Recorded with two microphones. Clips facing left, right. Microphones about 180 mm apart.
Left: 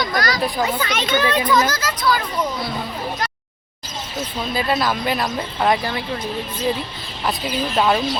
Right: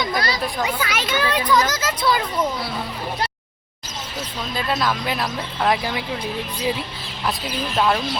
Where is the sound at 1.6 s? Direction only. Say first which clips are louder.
Left 1 dB; 20° right (ahead or behind).